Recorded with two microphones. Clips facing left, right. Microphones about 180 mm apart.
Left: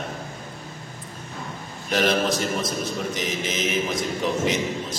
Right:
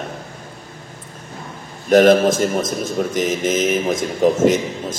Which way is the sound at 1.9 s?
50° right (ahead or behind).